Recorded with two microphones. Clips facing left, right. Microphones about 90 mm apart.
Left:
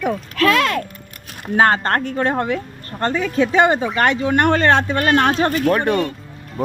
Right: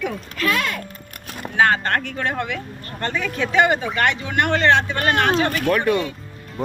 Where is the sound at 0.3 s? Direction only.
90° left.